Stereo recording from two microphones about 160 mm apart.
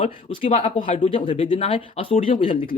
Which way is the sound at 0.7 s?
50° left (ahead or behind).